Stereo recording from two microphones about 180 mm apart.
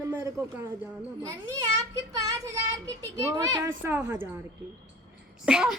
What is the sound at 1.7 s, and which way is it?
A child's voice, 20° right (ahead or behind).